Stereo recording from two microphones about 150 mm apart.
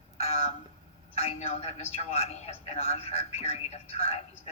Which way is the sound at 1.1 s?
45° left (ahead or behind).